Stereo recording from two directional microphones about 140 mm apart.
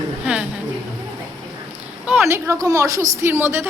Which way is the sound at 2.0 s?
10° right (ahead or behind).